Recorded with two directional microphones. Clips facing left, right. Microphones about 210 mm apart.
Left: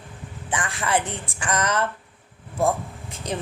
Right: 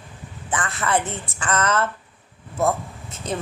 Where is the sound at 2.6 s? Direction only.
10° left (ahead or behind).